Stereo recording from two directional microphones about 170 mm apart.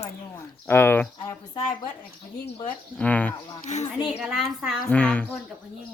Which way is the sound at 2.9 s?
10° left (ahead or behind).